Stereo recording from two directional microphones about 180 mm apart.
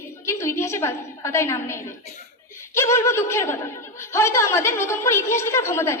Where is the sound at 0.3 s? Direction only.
15° left (ahead or behind).